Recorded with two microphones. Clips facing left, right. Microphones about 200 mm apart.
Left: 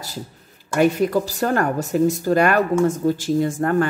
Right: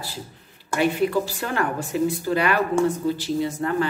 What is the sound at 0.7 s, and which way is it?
Speech, 45° left (ahead or behind).